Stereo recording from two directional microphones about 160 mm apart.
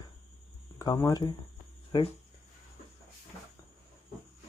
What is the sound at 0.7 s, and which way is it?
Speech, 20° left (ahead or behind).